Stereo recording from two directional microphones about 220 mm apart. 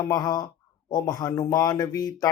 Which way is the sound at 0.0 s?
15° left (ahead or behind).